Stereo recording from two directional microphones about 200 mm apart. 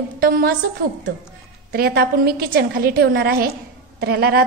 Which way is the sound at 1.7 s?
50° right (ahead or behind).